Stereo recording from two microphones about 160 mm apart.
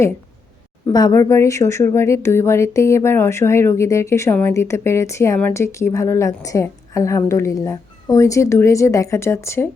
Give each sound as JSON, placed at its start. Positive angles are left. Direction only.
{"t": 0.9, "sound": "speech", "side_deg": 25}